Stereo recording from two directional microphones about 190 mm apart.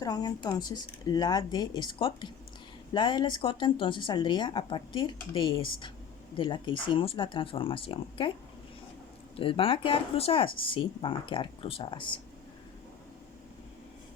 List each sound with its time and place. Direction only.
0.0 s speech: 20° left (ahead or behind)
9.4 s speech: 30° left (ahead or behind)